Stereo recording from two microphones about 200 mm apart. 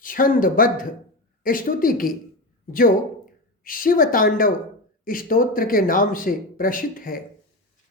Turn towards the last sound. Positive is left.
turn(degrees=45)  # may be behind; listen again after turning